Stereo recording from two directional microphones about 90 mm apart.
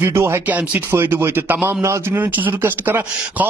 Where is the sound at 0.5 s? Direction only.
20° right (ahead or behind).